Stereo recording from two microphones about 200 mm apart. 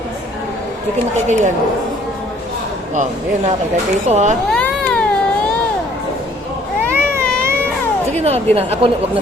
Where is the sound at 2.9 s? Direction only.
35° right (ahead or behind).